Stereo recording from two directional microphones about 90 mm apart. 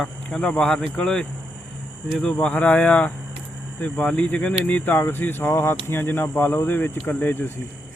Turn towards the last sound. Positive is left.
turn(degrees=25)  # may be behind; listen again after turning